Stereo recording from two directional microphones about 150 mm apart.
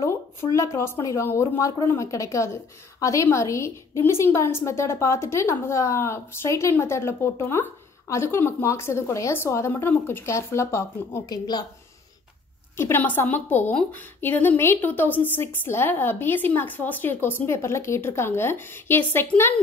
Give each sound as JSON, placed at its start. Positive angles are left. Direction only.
{"t": 0.0, "sound": "a woman's voice", "side_deg": 20}
{"t": 12.7, "sound": "a woman's voice", "side_deg": 15}